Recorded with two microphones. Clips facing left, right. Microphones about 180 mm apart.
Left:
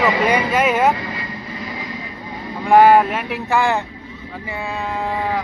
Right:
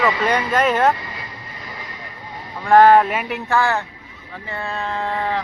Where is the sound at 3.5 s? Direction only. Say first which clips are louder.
Left 2 dB; 15° left (ahead or behind).